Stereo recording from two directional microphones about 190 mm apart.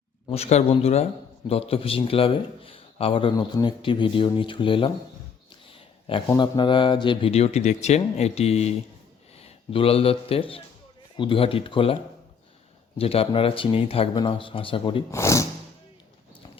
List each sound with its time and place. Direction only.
0.3 s a man's voice: 30° left (ahead or behind)
5.6 s a sound: 25° left (ahead or behind)
6.2 s a man's voice: 20° left (ahead or behind)
13.0 s a man's voice: 30° left (ahead or behind)
15.1 s speech: 15° left (ahead or behind)